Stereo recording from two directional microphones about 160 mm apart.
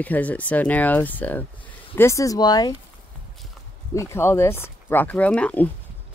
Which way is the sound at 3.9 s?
20° left (ahead or behind).